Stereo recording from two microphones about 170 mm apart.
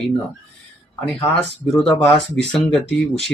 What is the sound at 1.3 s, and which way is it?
Speech, 5° left (ahead or behind).